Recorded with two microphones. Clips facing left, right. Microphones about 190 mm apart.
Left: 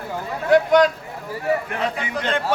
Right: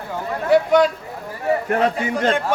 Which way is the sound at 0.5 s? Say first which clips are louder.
Even; 5° right (ahead or behind).